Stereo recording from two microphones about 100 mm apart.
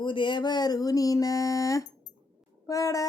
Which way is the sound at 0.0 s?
55° left (ahead or behind).